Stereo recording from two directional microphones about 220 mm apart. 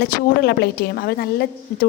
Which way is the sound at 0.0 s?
45° left (ahead or behind).